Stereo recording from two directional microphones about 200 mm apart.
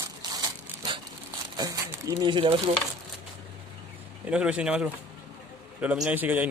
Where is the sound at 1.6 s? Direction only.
20° right (ahead or behind).